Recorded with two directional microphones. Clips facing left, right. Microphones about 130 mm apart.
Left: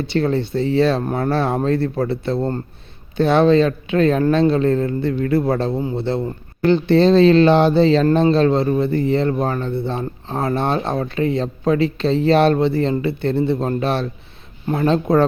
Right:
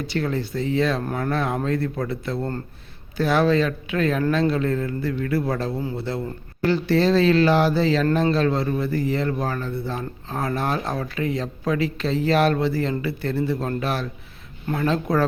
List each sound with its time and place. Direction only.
0.0 s speech: 30° left (ahead or behind)